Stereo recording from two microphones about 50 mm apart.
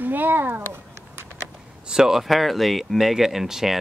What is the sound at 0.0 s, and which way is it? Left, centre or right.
Speech, right.